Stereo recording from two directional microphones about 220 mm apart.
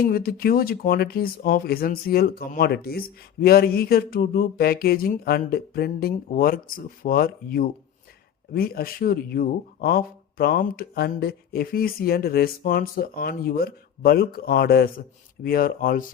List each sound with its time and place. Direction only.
0.0 s speech: 40° left (ahead or behind)